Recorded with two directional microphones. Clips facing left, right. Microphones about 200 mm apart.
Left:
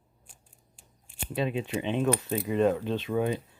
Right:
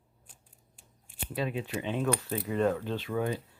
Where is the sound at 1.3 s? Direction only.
20° left (ahead or behind).